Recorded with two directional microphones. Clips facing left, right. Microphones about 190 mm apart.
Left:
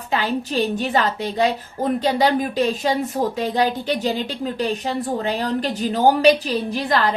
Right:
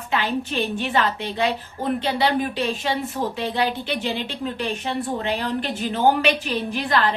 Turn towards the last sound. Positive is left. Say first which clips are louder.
# left 2 dB
turn(degrees=35)  # may be behind; listen again after turning